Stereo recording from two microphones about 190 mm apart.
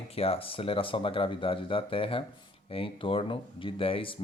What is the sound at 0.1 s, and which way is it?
Speech, 30° left (ahead or behind).